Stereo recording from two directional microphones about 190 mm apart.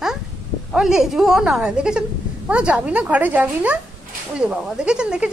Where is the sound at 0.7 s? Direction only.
Centre (ahead or behind).